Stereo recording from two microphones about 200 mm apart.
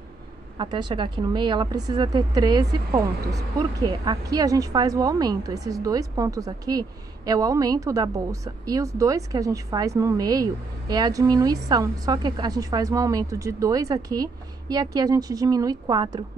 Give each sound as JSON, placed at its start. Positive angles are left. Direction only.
{"t": 0.6, "sound": "a woman's voice", "side_deg": -20}